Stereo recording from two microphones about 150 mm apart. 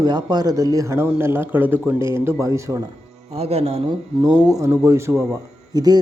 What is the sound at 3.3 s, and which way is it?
A man's voice, 40° right (ahead or behind).